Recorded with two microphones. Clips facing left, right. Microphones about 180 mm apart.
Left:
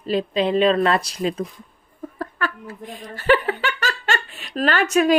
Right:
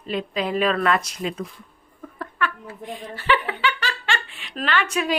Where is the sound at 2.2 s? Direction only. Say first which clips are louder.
Even; 40° left (ahead or behind).